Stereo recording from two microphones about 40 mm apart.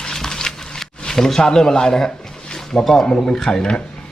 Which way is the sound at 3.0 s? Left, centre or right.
Left.